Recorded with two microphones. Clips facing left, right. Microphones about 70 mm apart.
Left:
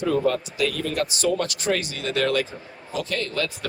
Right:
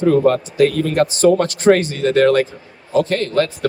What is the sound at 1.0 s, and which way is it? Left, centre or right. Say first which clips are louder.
A man's voice: right 11 dB; right.